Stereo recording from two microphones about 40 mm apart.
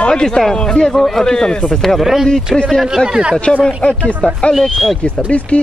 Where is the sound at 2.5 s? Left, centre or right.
Centre.